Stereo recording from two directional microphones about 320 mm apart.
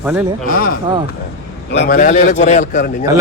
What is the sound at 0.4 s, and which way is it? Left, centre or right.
Speech, left.